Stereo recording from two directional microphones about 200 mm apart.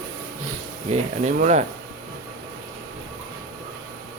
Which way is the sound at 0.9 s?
40° right (ahead or behind).